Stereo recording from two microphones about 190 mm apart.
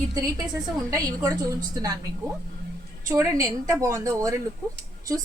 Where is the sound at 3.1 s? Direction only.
15° right (ahead or behind).